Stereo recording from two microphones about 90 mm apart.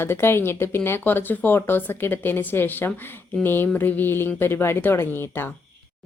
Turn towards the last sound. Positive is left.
turn(degrees=25)  # may be behind; listen again after turning